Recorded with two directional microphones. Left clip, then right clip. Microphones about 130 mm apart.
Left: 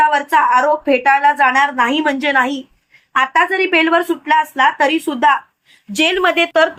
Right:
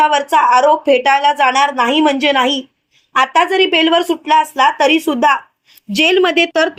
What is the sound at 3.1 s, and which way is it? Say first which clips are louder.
A woman's voice: right 2 dB; 45° right (ahead or behind).